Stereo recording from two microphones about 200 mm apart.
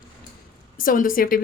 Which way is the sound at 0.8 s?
45° left (ahead or behind).